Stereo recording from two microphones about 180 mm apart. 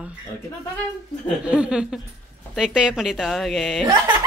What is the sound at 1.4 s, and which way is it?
A woman's voice, 5° right (ahead or behind).